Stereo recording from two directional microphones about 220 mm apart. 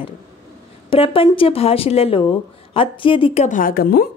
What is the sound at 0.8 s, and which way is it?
A woman's voice, 25° left (ahead or behind).